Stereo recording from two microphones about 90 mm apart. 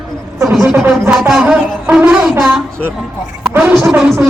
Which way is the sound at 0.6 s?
15° right (ahead or behind).